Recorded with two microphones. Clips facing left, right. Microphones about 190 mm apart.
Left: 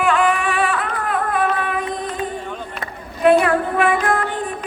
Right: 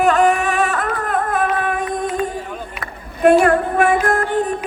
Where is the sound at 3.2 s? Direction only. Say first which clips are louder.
Right 2 dB; 45° right (ahead or behind).